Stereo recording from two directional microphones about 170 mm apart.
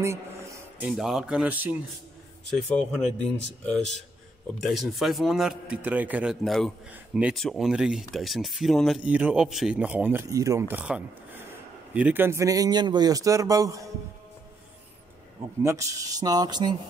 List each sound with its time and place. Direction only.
0.7 s a man's voice: 5° right (ahead or behind)
2.5 s speech: 5° left (ahead or behind)
4.6 s a man's voice: centre (ahead or behind); by 13.8 s 20° right (ahead or behind)
15.6 s speech: 20° right (ahead or behind)